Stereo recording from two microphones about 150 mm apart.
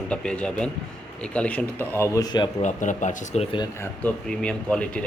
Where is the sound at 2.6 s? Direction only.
55° left (ahead or behind).